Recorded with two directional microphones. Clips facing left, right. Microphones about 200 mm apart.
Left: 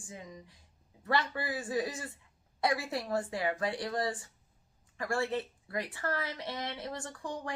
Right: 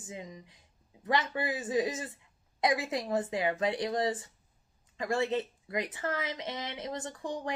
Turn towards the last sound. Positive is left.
turn(degrees=-20)  # may be behind; listen again after turning